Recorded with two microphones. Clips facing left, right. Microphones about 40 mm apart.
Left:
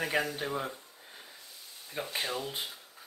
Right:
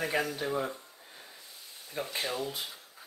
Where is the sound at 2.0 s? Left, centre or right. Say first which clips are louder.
Right 1 dB; left.